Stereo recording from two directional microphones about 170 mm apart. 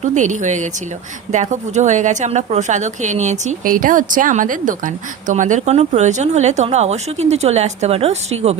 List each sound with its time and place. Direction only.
0.0 s a woman's voice: 45° right (ahead or behind)